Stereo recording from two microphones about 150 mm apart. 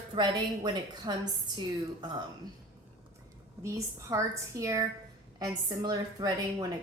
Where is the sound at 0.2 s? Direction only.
30° right (ahead or behind).